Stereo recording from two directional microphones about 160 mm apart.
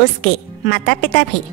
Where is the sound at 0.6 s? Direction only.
75° left (ahead or behind).